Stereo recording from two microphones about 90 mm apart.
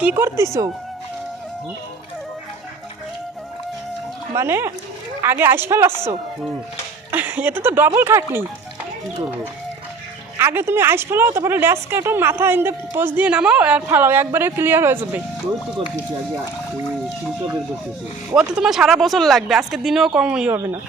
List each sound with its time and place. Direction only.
0.0 s a woman's voice: 25° right (ahead or behind)
4.4 s a woman's voice: 30° right (ahead or behind)
7.1 s a woman's voice: 20° right (ahead or behind)
10.3 s a woman's voice: 25° right (ahead or behind)
18.3 s speech: 10° right (ahead or behind)
20.5 s a woman's voice: 25° right (ahead or behind)